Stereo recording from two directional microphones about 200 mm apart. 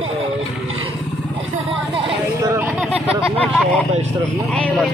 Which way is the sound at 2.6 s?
10° right (ahead or behind).